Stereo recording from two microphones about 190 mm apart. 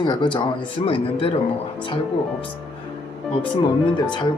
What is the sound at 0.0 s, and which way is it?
Speech, 25° left (ahead or behind).